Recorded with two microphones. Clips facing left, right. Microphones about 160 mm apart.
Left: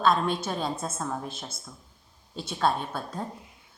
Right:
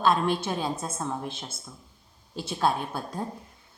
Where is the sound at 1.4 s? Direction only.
5° right (ahead or behind).